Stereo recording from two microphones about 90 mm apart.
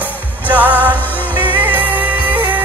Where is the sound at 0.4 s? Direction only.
20° right (ahead or behind).